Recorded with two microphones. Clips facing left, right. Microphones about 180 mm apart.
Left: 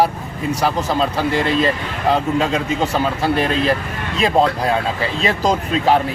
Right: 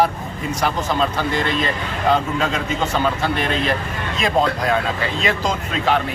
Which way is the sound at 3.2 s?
35° left (ahead or behind).